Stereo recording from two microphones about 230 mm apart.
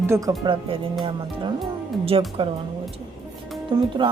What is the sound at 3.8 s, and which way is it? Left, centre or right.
Speech, centre.